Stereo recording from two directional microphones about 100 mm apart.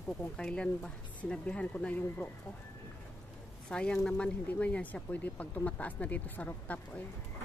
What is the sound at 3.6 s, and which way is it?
Speech, 10° left (ahead or behind).